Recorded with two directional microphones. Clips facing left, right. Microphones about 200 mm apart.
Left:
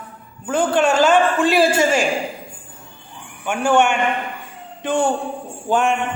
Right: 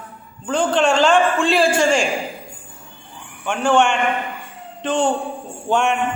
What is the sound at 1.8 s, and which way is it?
Speech, 5° left (ahead or behind).